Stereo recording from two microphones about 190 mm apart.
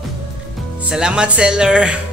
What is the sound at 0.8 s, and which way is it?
Speech, 5° right (ahead or behind).